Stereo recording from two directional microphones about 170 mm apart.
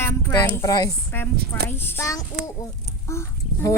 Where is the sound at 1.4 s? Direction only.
70° right (ahead or behind).